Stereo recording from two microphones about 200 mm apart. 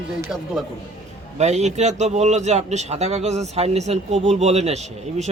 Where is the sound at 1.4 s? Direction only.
35° right (ahead or behind).